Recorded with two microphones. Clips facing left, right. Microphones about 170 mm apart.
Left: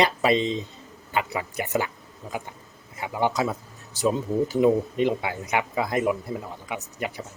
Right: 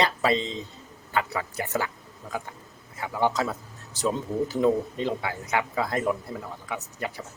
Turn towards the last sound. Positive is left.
turn(degrees=15)  # may be behind; listen again after turning